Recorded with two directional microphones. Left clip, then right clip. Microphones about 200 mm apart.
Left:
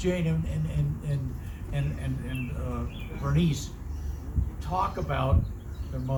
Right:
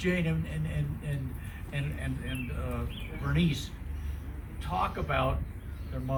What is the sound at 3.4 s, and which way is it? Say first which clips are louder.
Speech: left 1 dB; 40° left (ahead or behind).